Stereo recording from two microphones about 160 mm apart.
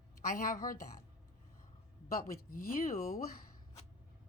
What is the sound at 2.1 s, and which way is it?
A woman's voice, 65° left (ahead or behind).